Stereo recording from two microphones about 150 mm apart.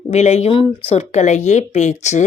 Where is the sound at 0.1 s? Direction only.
45° left (ahead or behind).